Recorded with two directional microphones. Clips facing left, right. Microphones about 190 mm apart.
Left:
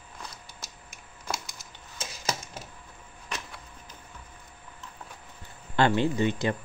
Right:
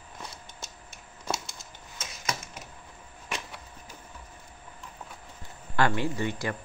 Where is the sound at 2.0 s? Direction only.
30° left (ahead or behind).